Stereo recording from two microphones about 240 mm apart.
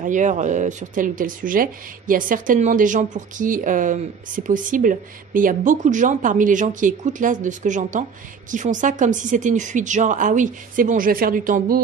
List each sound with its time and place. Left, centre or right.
0.0 s speech: right